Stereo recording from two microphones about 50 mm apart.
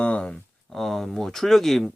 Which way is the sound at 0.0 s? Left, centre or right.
Left.